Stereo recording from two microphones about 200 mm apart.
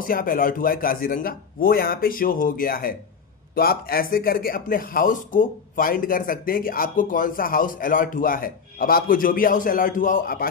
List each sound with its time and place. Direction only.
0.0 s speech: 45° left (ahead or behind)